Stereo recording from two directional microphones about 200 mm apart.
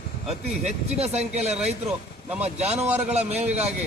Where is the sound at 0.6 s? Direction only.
35° right (ahead or behind).